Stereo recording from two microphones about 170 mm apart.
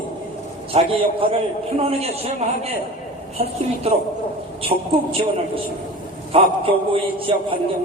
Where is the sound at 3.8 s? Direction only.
35° right (ahead or behind).